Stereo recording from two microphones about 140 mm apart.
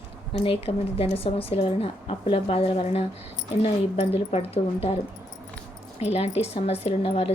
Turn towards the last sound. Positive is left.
turn(degrees=45)  # may be behind; listen again after turning